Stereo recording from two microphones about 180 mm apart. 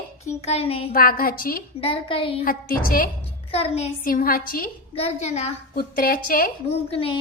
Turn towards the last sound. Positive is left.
turn(degrees=30)  # may be behind; listen again after turning